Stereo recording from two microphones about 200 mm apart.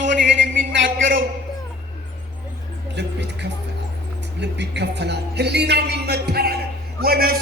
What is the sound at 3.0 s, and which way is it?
A man's voice, 60° right (ahead or behind).